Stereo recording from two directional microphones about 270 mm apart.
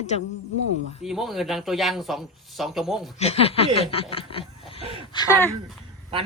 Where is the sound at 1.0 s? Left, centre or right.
Centre.